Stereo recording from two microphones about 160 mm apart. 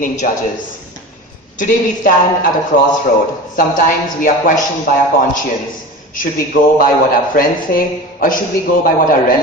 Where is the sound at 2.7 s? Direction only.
60° left (ahead or behind).